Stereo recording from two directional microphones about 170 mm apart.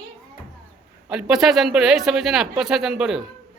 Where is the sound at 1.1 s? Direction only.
Centre (ahead or behind).